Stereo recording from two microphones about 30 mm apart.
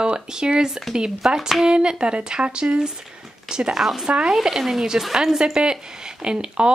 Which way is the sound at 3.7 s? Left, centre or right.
Centre.